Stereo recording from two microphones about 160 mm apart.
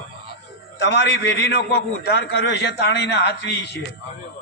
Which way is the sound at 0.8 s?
90° left.